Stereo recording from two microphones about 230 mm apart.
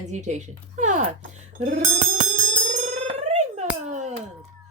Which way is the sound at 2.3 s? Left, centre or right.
Right.